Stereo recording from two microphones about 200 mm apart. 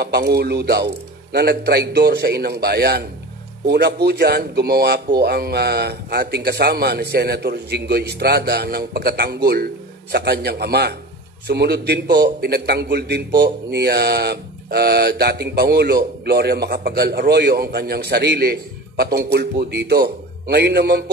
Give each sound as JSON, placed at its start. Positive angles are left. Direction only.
{"t": 0.0, "sound": "a man's voice", "side_deg": -55}